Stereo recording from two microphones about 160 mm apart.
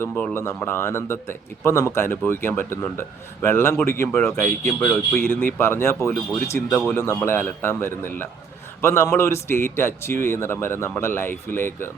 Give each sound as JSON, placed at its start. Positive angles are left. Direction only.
{"t": 0.0, "sound": "a man's voice", "side_deg": 10}